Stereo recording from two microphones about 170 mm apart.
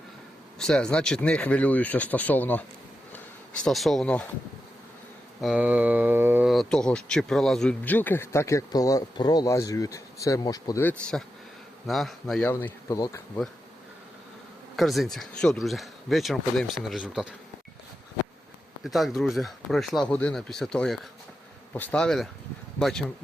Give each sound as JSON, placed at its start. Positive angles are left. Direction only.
{"t": 0.6, "sound": "speech", "side_deg": 5}
{"t": 5.4, "sound": "a sound", "side_deg": -5}
{"t": 6.5, "sound": "speech", "side_deg": 0}
{"t": 14.8, "sound": "speech", "side_deg": 0}
{"t": 18.8, "sound": "speech", "side_deg": 0}